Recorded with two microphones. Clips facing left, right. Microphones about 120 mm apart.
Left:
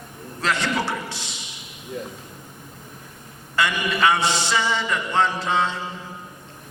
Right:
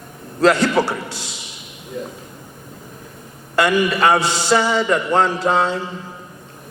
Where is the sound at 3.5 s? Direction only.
45° right (ahead or behind).